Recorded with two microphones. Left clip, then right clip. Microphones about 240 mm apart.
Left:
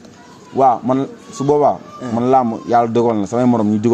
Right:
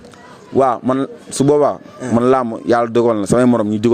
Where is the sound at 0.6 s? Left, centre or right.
Right.